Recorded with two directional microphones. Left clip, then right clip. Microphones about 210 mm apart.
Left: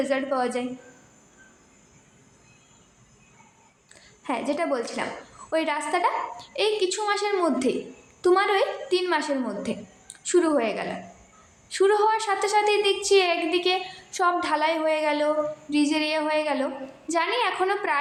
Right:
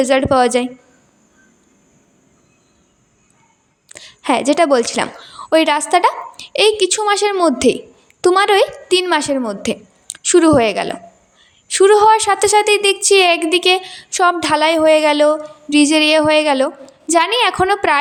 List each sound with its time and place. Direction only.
0.0 s a woman's voice: 45° right (ahead or behind)
3.8 s a woman's voice: 45° right (ahead or behind)